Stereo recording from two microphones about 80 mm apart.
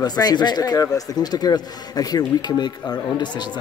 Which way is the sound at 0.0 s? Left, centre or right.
Left.